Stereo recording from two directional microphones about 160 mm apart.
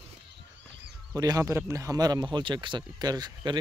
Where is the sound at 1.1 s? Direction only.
20° right (ahead or behind).